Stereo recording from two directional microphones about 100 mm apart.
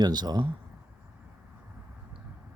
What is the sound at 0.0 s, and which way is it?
Speech, 45° right (ahead or behind).